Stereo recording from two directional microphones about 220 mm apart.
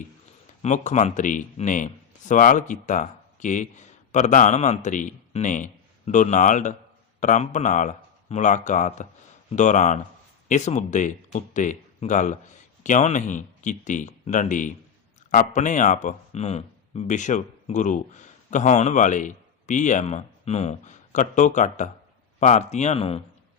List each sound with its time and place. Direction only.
0.6 s speech: 35° left (ahead or behind)